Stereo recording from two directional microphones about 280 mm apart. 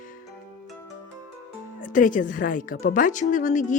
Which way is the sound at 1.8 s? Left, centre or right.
Left.